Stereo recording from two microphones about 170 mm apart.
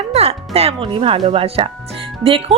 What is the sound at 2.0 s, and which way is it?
Music, 30° right (ahead or behind).